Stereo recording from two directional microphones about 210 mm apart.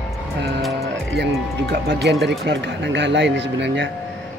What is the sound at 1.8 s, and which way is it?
A man's voice, 55° right (ahead or behind).